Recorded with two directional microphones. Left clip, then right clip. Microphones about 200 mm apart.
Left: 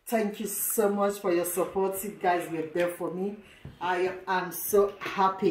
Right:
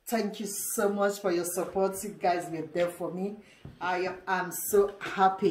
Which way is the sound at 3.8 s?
15° right (ahead or behind).